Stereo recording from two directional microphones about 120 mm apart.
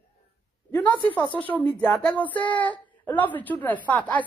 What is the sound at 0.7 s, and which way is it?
A woman's voice, 15° left (ahead or behind).